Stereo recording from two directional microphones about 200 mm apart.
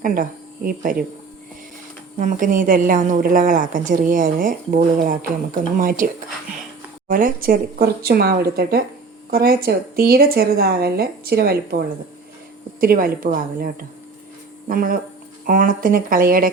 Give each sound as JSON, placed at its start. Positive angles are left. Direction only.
{"t": 0.0, "sound": "speech", "side_deg": -45}
{"t": 2.1, "sound": "a woman's voice", "side_deg": -40}
{"t": 7.1, "sound": "a woman's voice", "side_deg": -45}